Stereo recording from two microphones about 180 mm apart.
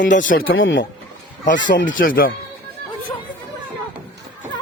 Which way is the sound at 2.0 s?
50° left (ahead or behind).